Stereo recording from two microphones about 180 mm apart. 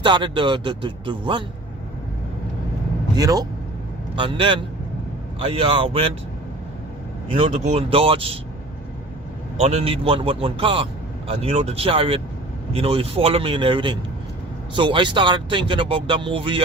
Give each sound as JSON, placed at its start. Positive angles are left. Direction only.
{"t": 0.0, "sound": "speech", "side_deg": -25}
{"t": 3.2, "sound": "speech", "side_deg": -20}
{"t": 7.3, "sound": "speech", "side_deg": -35}
{"t": 9.6, "sound": "speech", "side_deg": -35}